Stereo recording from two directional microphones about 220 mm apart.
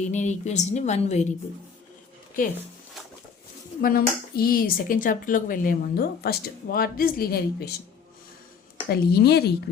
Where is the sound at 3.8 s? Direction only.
40° left (ahead or behind).